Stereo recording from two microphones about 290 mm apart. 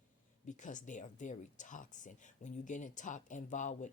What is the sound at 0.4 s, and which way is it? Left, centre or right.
Speech, left.